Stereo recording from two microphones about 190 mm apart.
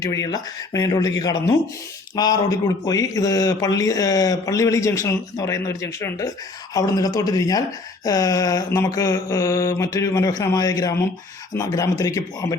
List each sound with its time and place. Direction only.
0.0 s speech: 15° left (ahead or behind)
8.0 s mantra: 20° left (ahead or behind)